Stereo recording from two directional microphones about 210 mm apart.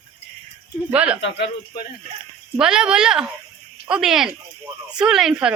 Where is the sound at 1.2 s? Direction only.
50° left (ahead or behind).